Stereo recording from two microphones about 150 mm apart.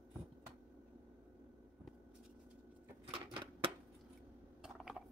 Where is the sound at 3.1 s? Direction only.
35° right (ahead or behind).